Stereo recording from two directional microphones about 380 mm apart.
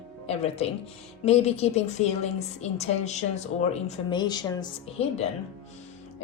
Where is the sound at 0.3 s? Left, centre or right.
Centre.